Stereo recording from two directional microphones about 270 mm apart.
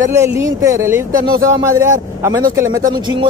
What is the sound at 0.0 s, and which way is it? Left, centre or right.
Speech, centre.